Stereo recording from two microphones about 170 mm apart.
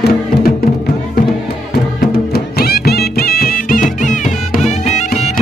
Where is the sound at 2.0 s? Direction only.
65° left (ahead or behind).